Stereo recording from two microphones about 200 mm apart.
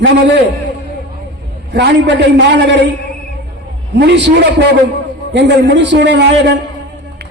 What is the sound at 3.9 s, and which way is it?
A man's voice, 60° right (ahead or behind).